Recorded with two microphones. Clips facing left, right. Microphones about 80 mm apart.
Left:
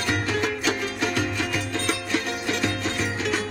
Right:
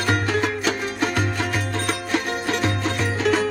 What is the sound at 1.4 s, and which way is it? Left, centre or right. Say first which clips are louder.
Music: right 2 dB; right.